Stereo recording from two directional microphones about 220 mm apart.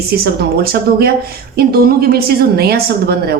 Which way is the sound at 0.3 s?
45° right (ahead or behind).